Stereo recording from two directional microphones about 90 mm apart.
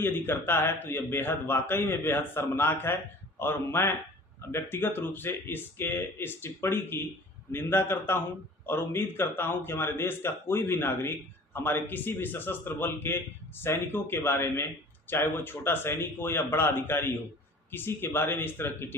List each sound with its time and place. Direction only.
0.0 s a man's voice: 25° left (ahead or behind)